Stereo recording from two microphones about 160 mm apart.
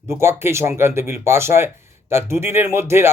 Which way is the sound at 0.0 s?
15° right (ahead or behind).